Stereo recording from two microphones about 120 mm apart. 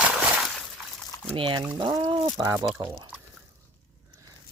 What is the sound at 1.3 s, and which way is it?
Speech, 45° right (ahead or behind).